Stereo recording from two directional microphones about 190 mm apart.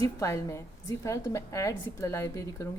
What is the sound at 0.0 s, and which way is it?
A woman's voice, 15° left (ahead or behind).